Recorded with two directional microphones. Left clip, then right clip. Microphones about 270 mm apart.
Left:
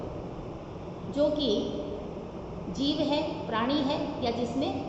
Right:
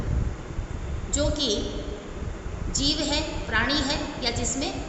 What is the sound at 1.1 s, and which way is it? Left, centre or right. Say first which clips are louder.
Speech: even; right.